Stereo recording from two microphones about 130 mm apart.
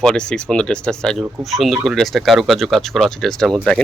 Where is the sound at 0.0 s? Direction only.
5° left (ahead or behind).